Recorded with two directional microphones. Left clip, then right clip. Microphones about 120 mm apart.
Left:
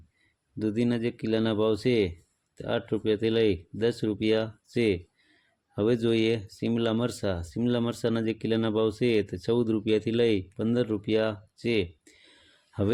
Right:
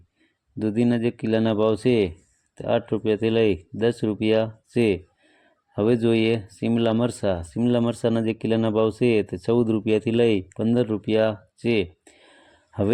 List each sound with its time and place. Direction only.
0.6 s speech: 30° right (ahead or behind)